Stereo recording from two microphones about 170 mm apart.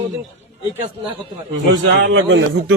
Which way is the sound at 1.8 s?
90° right.